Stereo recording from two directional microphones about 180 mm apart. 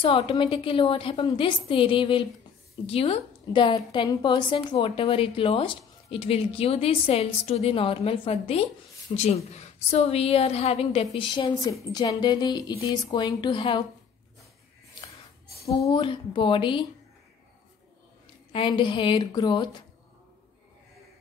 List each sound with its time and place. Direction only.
0.0 s a woman's voice: 30° left (ahead or behind)
15.8 s a woman's voice: 25° left (ahead or behind)
18.5 s a woman's voice: 25° left (ahead or behind)